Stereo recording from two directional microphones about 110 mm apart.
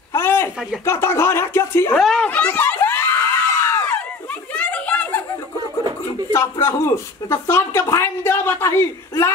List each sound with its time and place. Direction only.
0.1 s a sound: 20° left (ahead or behind)
0.8 s speech: 25° left (ahead or behind)
2.0 s speech: centre (ahead or behind)
2.2 s screaming: 15° left (ahead or behind)
4.6 s a sound: 10° left (ahead or behind)
6.3 s speech: 25° left (ahead or behind)